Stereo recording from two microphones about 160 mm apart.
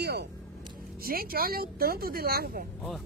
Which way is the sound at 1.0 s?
65° right (ahead or behind).